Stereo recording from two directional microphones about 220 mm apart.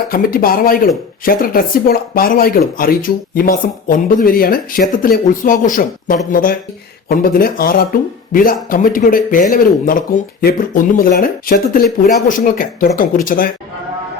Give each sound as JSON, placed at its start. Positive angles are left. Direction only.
{"t": 0.1, "sound": "speech", "side_deg": 40}